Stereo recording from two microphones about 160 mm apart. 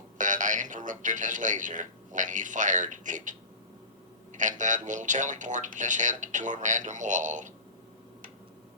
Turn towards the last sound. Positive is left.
turn(degrees=-50)  # may be behind; listen again after turning